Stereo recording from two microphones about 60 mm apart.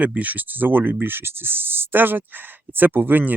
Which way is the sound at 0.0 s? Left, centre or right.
Right.